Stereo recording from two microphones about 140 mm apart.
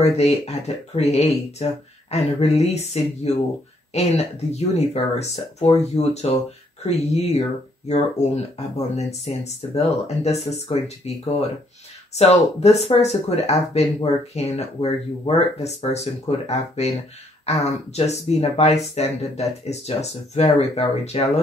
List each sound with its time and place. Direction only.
0.0 s speech: 45° left (ahead or behind)